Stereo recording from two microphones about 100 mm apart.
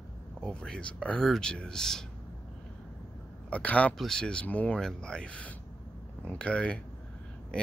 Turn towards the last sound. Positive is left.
turn(degrees=10)  # may be behind; listen again after turning